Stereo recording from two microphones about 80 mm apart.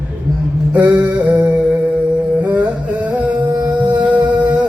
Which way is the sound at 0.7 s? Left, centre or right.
Centre.